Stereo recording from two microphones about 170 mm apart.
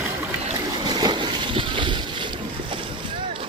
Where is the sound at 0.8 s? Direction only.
25° right (ahead or behind).